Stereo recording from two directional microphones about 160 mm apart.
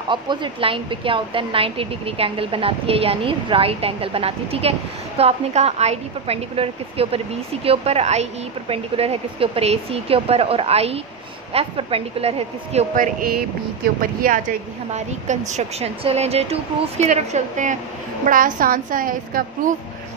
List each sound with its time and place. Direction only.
0.1 s speech: 30° right (ahead or behind)
12.9 s a woman's voice: 55° right (ahead or behind)
14.9 s a woman's voice: 45° right (ahead or behind)